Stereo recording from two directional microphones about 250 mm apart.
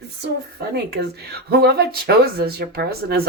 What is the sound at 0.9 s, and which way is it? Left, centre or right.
Speech, right.